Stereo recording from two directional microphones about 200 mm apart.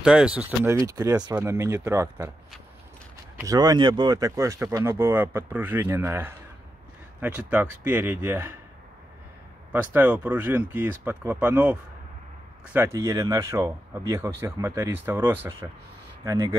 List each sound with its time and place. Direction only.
0.0 s speech: 5° right (ahead or behind)
0.8 s speech: 15° right (ahead or behind)
3.3 s speech: 15° right (ahead or behind)
9.7 s speech: 10° right (ahead or behind)